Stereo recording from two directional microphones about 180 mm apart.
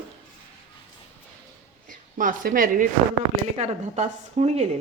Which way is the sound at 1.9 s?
50° right (ahead or behind).